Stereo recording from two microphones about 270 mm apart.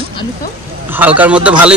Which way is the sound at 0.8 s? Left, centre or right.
Centre.